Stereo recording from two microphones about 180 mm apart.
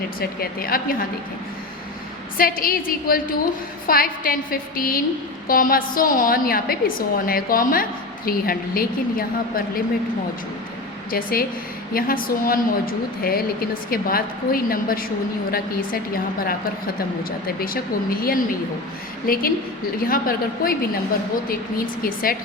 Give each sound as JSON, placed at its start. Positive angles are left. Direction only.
{"t": 0.2, "sound": "a woman's voice", "side_deg": 55}
{"t": 2.4, "sound": "a woman's voice", "side_deg": 50}
{"t": 11.1, "sound": "a woman's voice", "side_deg": 55}
{"t": 18.2, "sound": "a woman's voice", "side_deg": 55}
{"t": 21.8, "sound": "a woman's voice", "side_deg": 55}